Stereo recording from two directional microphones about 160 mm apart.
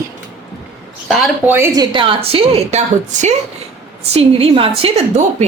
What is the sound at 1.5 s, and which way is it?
Speech, 15° right (ahead or behind).